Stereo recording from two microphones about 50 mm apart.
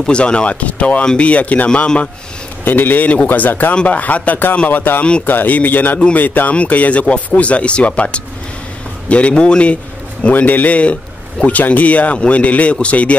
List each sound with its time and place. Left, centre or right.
0.0 s a man's voice: left
2.6 s a man's voice: left
10.3 s a man's voice: left